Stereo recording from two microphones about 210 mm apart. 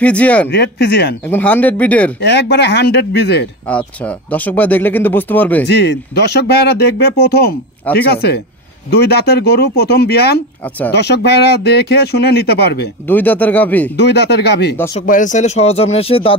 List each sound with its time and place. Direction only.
0.0 s speech: 5° left (ahead or behind)
0.5 s speech: 50° left (ahead or behind)
1.2 s speech: 10° left (ahead or behind)
2.1 s speech: 50° left (ahead or behind)
3.6 s speech: 5° left (ahead or behind)
5.7 s speech: 55° left (ahead or behind)
13.0 s speech: 10° left (ahead or behind)
13.9 s speech: 50° left (ahead or behind)
15.0 s speech: 35° left (ahead or behind)